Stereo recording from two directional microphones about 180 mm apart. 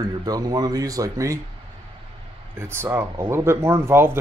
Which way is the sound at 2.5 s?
15° right (ahead or behind).